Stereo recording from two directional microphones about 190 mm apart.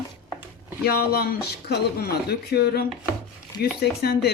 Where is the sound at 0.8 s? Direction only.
55° left (ahead or behind).